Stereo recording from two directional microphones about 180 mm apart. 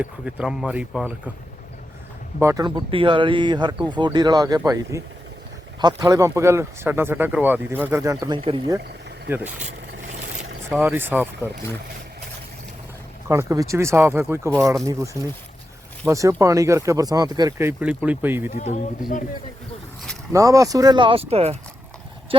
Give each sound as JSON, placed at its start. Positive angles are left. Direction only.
{"t": 0.0, "sound": "speech", "side_deg": -5}
{"t": 2.4, "sound": "speech", "side_deg": -20}
{"t": 10.7, "sound": "speech", "side_deg": -10}
{"t": 13.5, "sound": "speech", "side_deg": -15}
{"t": 18.5, "sound": "speech", "side_deg": 40}
{"t": 20.3, "sound": "speech", "side_deg": -20}